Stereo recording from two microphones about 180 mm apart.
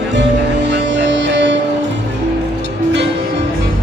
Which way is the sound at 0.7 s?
90° right.